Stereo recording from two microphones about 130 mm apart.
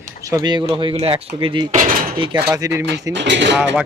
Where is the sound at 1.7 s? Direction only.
85° right.